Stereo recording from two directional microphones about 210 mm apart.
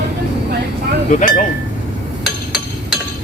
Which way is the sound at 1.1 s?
40° left (ahead or behind).